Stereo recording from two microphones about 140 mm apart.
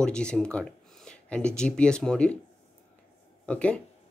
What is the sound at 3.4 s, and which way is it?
Speech, 10° left (ahead or behind).